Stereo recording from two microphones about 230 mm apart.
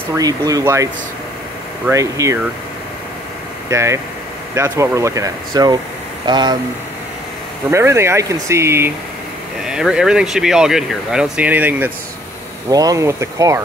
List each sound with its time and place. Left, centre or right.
0.1 s speech: centre
1.9 s speech: centre
3.7 s speech: centre
7.7 s speech: centre